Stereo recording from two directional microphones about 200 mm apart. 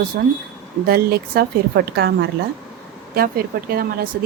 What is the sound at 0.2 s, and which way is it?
Speech, 55° right (ahead or behind).